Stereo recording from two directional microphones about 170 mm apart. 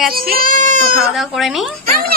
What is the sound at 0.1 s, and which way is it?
Speech, 60° right (ahead or behind).